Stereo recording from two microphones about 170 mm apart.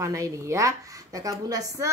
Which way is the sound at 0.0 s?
15° right (ahead or behind).